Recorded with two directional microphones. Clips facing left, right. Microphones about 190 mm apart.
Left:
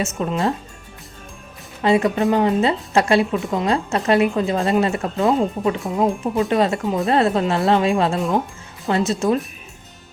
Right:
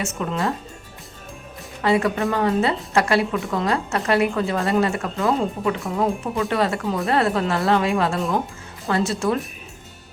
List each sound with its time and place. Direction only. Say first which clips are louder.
0.2 s a woman's voice: left 3 dB; 25° left (ahead or behind)
1.8 s a woman's voice: left 3 dB; 20° left (ahead or behind)